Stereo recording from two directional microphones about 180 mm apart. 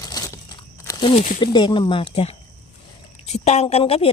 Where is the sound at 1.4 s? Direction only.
25° left (ahead or behind).